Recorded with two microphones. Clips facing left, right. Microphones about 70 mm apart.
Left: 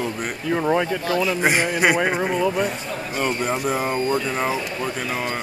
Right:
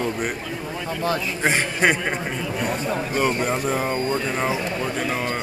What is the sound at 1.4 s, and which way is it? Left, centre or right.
Speech, centre.